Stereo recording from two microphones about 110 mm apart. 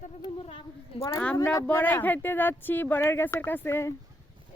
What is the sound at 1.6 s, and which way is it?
Speech, 15° left (ahead or behind).